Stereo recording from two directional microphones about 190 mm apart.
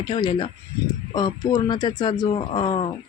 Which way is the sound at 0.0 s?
25° left (ahead or behind).